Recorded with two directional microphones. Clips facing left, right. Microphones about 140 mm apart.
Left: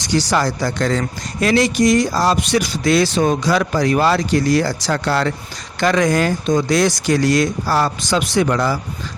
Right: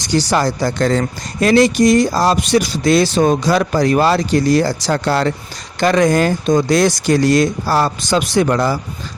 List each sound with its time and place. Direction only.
0.3 s speech: 30° right (ahead or behind)
6.1 s speech: 40° right (ahead or behind)